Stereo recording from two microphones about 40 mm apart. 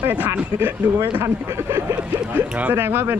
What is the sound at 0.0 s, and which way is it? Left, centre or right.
Speech, right.